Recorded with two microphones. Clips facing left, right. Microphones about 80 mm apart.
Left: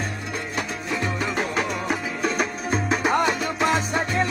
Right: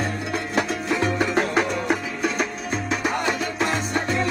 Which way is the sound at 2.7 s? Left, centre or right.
Left.